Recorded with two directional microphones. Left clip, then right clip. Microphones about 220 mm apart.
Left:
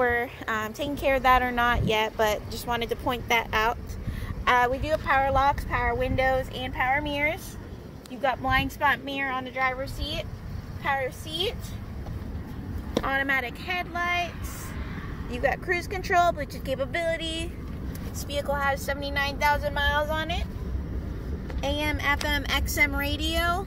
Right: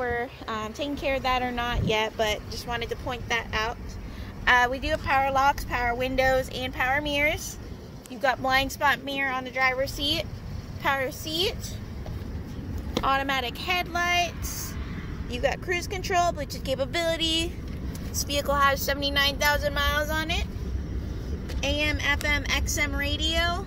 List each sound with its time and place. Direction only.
0.0 s speech: 30° left (ahead or behind)
4.6 s speech: 5° right (ahead or behind); by 9.2 s 20° right (ahead or behind)
9.9 s speech: 40° right (ahead or behind)
13.0 s speech: 5° right (ahead or behind)
13.7 s speech: 25° right (ahead or behind)
15.3 s speech: centre (ahead or behind)
17.0 s speech: 20° right (ahead or behind)
18.2 s speech: 35° right (ahead or behind)
21.5 s speech: 5° right (ahead or behind)
22.3 s speech: 20° left (ahead or behind)